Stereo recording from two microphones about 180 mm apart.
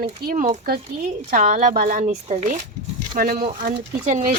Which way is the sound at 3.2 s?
50° right (ahead or behind).